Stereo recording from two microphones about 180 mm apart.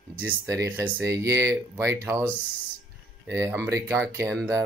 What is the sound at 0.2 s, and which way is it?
Speech, 15° right (ahead or behind).